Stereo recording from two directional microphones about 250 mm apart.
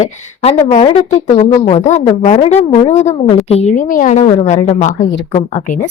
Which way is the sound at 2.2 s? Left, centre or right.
Left.